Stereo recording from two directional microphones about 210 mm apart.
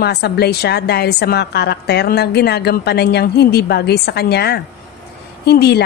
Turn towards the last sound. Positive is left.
turn(degrees=50)  # may be behind; listen again after turning